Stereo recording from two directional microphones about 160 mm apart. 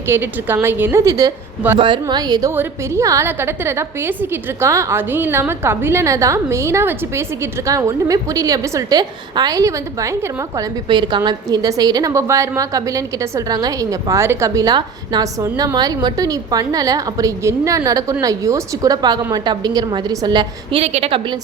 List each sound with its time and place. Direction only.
0.1 s a woman's voice: 15° right (ahead or behind)
1.8 s a woman's voice: 30° right (ahead or behind)
20.8 s a woman's voice: 40° right (ahead or behind)